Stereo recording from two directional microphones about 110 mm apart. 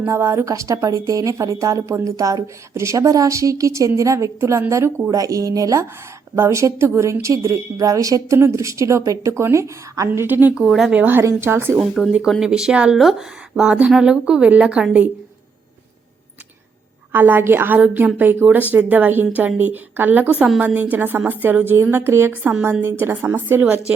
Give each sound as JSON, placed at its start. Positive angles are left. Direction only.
{"t": 0.0, "sound": "speech", "side_deg": -25}
{"t": 10.1, "sound": "speech", "side_deg": -15}
{"t": 10.9, "sound": "speech", "side_deg": -15}
{"t": 11.8, "sound": "speech", "side_deg": 0}
{"t": 17.1, "sound": "speech", "side_deg": -20}